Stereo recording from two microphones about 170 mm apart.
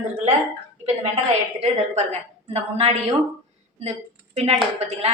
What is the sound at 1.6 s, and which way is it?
A woman's voice, 40° right (ahead or behind).